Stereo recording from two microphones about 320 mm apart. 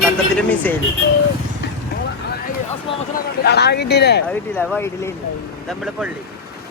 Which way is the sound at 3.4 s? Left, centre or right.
Left.